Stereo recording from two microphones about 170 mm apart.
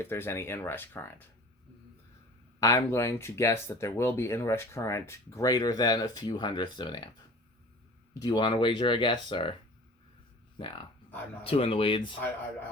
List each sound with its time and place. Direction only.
0.0 s speech: 15° left (ahead or behind)
2.6 s speech: 20° left (ahead or behind)
8.2 s speech: 25° left (ahead or behind)
10.6 s speech: 30° left (ahead or behind)